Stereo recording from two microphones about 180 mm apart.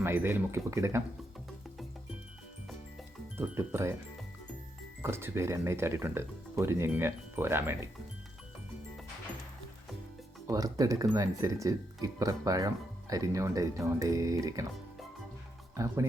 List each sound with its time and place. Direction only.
0.0 s speech: 10° right (ahead or behind)
3.3 s speech: 10° right (ahead or behind)
5.0 s speech: 15° right (ahead or behind)
10.4 s speech: 20° right (ahead or behind)
15.7 s speech: 15° right (ahead or behind)